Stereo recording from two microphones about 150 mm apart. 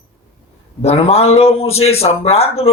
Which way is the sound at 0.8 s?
40° left (ahead or behind).